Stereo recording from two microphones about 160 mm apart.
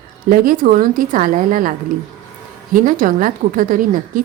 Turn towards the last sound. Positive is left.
turn(degrees=-60)  # may be behind; listen again after turning